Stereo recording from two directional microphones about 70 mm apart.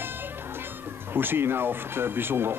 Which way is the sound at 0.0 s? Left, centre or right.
Right.